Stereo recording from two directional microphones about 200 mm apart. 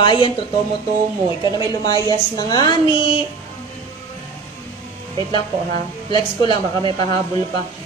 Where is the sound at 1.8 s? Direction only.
20° left (ahead or behind).